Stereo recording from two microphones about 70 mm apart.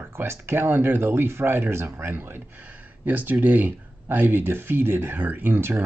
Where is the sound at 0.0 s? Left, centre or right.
Right.